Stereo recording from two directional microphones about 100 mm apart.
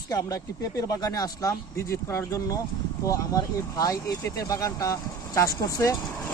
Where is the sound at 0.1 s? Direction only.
35° left (ahead or behind).